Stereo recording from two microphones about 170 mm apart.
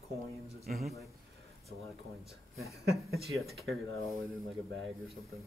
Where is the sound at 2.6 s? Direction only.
20° left (ahead or behind).